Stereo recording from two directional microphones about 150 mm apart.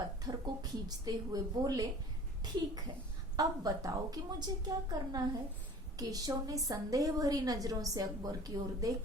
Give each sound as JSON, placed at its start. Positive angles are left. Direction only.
{"t": 0.3, "sound": "a woman's voice", "side_deg": -25}
{"t": 3.3, "sound": "a woman's voice", "side_deg": -25}